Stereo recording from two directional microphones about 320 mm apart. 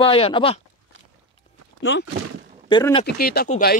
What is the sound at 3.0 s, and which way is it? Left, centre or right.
Speech, left.